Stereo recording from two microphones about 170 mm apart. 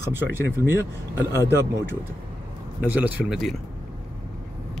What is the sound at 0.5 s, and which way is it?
Speech, 15° right (ahead or behind).